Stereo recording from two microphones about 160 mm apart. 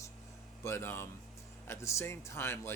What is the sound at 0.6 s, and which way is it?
Speech, 15° left (ahead or behind).